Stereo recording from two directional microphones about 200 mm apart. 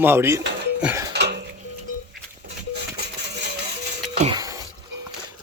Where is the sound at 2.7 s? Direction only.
55° right (ahead or behind).